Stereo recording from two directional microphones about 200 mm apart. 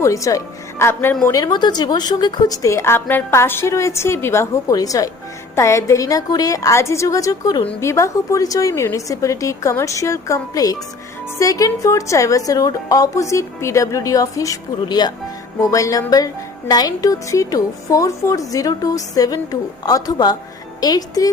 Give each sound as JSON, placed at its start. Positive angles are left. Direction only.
{"t": 0.0, "sound": "a woman's voice", "side_deg": 15}